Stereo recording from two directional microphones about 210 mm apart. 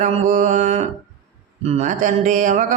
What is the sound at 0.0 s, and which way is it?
Speech, 35° right (ahead or behind).